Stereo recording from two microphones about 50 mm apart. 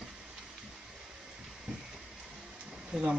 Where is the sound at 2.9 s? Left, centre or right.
Centre.